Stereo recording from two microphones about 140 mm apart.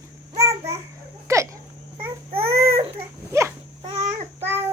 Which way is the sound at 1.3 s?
20° right (ahead or behind).